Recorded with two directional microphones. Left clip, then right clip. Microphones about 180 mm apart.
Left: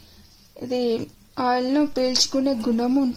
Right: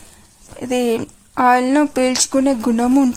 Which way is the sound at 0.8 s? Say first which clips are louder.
Right 5 dB; 45° right (ahead or behind).